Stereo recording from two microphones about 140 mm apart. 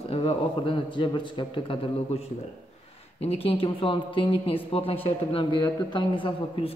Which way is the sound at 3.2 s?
45° left (ahead or behind).